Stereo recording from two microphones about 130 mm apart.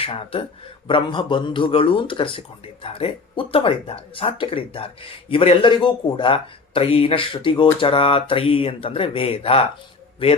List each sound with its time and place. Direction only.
0.0 s speech: 45° left (ahead or behind)